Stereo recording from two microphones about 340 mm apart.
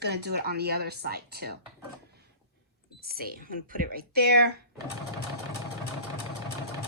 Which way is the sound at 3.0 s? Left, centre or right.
Right.